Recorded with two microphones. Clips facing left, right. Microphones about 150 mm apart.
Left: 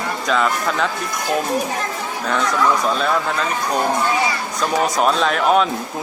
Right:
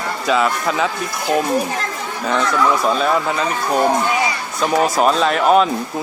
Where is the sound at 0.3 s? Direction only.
5° right (ahead or behind).